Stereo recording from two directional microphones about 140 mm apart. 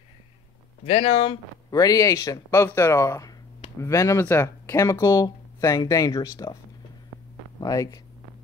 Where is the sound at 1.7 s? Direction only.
25° left (ahead or behind).